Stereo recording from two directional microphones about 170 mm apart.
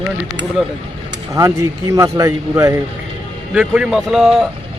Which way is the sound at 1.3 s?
20° right (ahead or behind).